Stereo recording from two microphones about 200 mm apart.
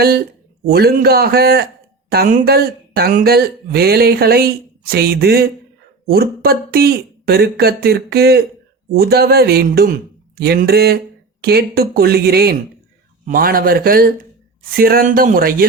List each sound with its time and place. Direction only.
0.0 s speech: 50° right (ahead or behind)